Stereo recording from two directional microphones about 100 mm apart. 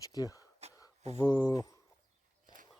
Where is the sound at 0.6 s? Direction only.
90° right.